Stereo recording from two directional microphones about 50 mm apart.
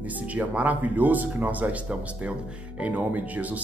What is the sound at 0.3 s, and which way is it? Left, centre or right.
Speech, right.